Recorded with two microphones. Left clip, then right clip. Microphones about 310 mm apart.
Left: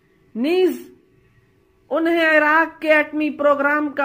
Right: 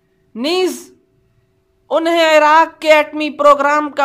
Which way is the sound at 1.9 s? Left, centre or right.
Centre.